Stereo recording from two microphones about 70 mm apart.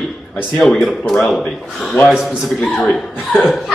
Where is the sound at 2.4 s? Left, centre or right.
Centre.